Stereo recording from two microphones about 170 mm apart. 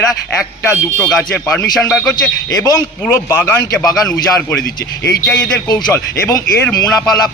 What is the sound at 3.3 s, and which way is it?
A man's voice, 10° left (ahead or behind).